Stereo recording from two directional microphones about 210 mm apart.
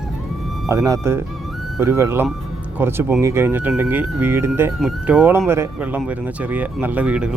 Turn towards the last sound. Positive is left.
turn(degrees=-5)  # may be behind; listen again after turning